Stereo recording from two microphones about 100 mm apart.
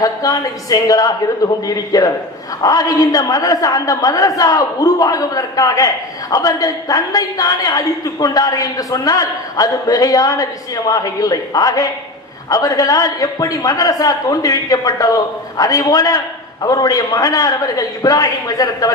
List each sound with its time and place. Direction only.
0.0 s a woman's voice: 35° left (ahead or behind)